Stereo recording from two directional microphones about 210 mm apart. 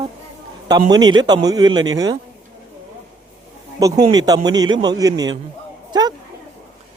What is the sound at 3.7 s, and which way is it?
A man's voice, 15° right (ahead or behind).